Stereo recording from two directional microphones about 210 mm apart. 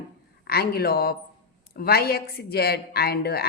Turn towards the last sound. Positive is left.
turn(degrees=50)  # may be behind; listen again after turning